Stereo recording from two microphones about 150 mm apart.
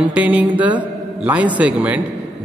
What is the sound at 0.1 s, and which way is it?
A man's voice, 10° right (ahead or behind).